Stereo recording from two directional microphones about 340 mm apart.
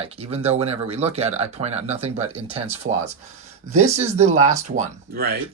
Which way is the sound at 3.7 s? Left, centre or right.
Centre.